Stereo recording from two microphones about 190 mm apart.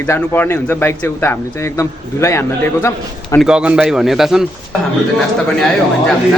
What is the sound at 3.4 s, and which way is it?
A man's voice, 5° right (ahead or behind).